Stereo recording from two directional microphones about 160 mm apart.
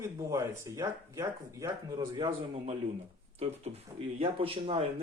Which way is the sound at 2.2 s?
35° right (ahead or behind).